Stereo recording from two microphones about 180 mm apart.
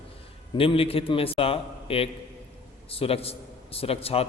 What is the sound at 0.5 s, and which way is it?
A man's voice, 30° left (ahead or behind).